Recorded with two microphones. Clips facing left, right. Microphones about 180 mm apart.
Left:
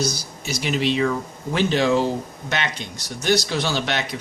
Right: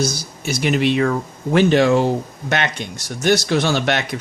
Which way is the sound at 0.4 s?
55° right (ahead or behind).